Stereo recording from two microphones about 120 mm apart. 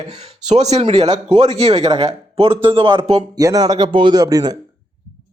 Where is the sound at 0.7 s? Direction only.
60° right (ahead or behind).